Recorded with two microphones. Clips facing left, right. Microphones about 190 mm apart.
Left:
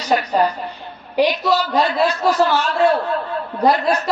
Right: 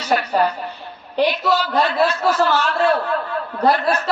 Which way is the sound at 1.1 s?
10° left (ahead or behind).